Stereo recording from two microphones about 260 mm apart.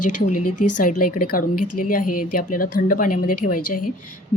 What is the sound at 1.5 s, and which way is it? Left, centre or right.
Speech, left.